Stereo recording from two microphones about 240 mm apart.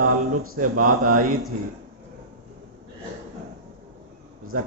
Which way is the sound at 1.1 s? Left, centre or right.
Right.